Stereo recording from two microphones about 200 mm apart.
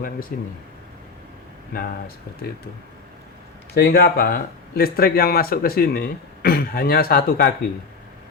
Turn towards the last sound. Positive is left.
turn(degrees=50)  # may be behind; listen again after turning